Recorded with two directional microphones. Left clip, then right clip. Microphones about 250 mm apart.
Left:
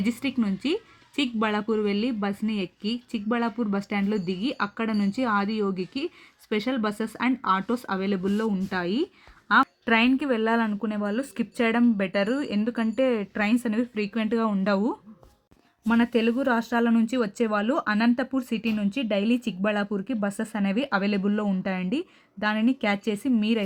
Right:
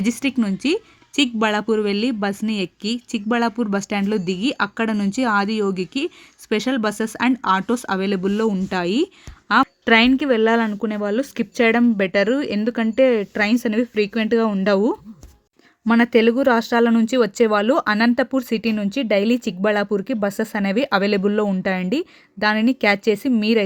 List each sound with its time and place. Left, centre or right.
0.0 s a woman's voice: right